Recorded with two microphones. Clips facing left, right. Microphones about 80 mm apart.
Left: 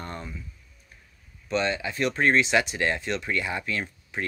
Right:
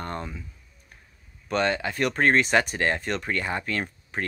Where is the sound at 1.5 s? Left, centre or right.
Right.